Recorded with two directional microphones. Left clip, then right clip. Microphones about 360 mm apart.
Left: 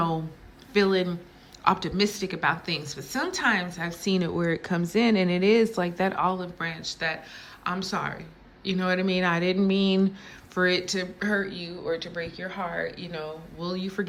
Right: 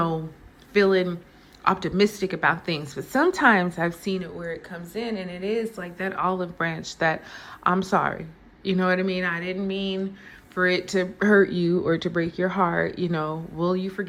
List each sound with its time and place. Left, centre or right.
0.7 s a woman's voice: centre
4.4 s a woman's voice: centre